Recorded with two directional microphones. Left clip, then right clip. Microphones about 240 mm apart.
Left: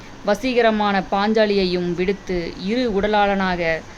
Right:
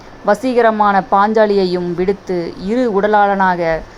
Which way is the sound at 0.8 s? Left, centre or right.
Centre.